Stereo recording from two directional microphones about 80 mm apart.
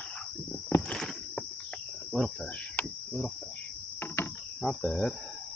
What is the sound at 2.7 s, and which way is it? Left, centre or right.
Cricket, centre.